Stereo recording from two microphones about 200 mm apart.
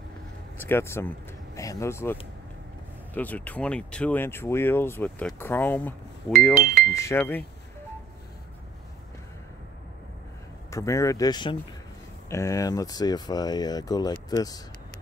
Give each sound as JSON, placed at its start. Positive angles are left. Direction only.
{"t": 0.6, "sound": "speech", "side_deg": 10}
{"t": 3.2, "sound": "speech", "side_deg": 10}
{"t": 6.5, "sound": "speech", "side_deg": -45}
{"t": 6.9, "sound": "speech", "side_deg": 15}
{"t": 10.7, "sound": "speech", "side_deg": 15}